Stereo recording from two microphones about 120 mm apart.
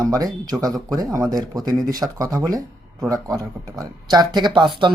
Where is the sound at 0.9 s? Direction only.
30° right (ahead or behind).